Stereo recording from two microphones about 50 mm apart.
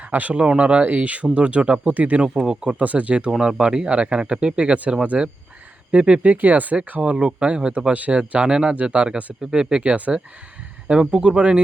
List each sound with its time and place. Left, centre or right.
0.1 s speech: right
0.3 s speech: right
2.5 s speech: centre
2.7 s speech: right
3.2 s speech: centre; by 6.7 s right
7.0 s speech: right
11.0 s speech: centre